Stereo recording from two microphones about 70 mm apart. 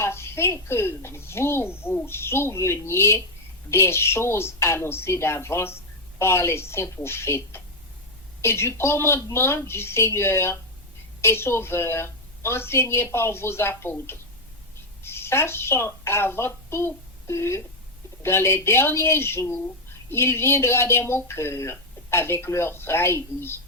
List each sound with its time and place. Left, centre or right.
0.0 s a woman's voice: left